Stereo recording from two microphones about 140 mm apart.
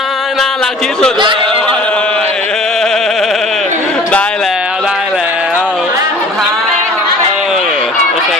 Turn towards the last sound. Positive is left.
turn(degrees=-5)  # may be behind; listen again after turning